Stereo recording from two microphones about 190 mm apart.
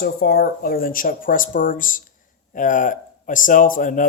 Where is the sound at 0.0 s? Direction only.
55° left (ahead or behind).